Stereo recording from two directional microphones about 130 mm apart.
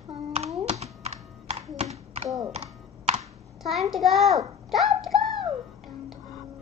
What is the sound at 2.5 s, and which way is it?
Computer keyboard, 55° right (ahead or behind).